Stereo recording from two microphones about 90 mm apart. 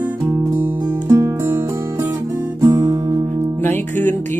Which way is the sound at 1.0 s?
40° right (ahead or behind).